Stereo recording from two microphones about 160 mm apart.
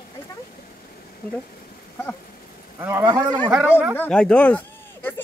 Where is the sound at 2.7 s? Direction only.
15° right (ahead or behind).